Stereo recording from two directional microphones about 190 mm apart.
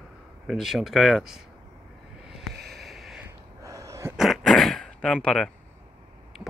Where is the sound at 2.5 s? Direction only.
55° right (ahead or behind).